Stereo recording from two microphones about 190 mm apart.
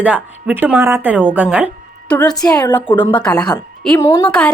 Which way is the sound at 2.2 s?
20° left (ahead or behind).